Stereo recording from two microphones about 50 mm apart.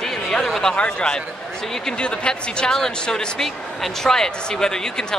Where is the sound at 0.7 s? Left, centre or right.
Left.